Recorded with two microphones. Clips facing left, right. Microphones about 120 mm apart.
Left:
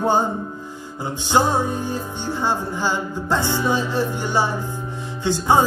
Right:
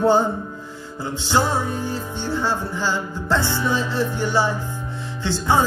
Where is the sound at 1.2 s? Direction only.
15° left (ahead or behind).